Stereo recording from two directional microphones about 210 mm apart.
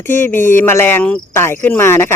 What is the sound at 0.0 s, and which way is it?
Cricket, 10° left (ahead or behind).